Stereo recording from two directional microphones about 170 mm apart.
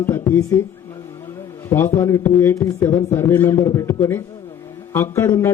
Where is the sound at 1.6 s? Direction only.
15° left (ahead or behind).